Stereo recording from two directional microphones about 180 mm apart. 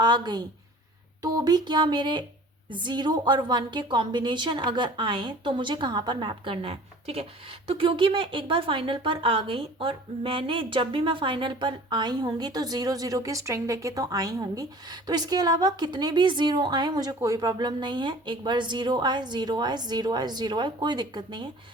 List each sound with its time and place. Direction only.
0.0 s a woman's voice: 25° right (ahead or behind)